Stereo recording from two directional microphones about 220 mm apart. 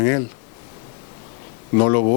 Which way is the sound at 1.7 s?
25° left (ahead or behind).